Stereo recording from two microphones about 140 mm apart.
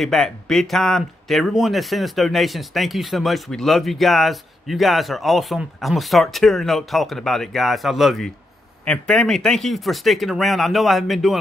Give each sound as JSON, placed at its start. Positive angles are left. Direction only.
{"t": 0.0, "sound": "speech", "side_deg": 5}